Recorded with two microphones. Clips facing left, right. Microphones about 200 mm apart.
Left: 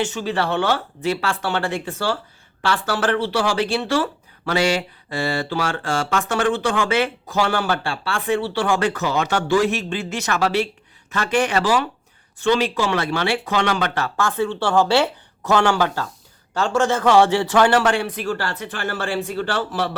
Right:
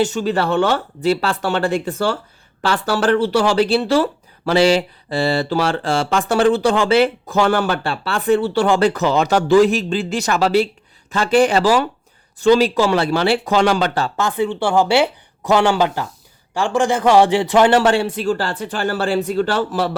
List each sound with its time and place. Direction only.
0.0 s speech: 40° right (ahead or behind)
7.5 s speech: 45° right (ahead or behind); by 14.3 s 30° right (ahead or behind)
14.3 s a man's voice: 15° right (ahead or behind); by 19.8 s 40° right (ahead or behind)